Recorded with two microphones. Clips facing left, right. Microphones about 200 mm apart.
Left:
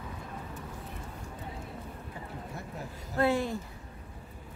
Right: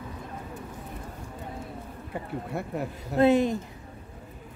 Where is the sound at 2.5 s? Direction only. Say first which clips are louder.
Right 9 dB; 65° right (ahead or behind).